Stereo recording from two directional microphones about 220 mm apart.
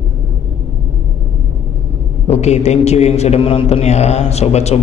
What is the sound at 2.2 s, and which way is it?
A man's voice, 30° left (ahead or behind).